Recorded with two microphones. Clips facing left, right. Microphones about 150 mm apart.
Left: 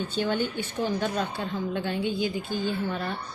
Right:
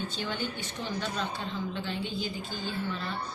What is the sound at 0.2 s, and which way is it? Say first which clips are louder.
Speech: left 11 dB; 50° left (ahead or behind).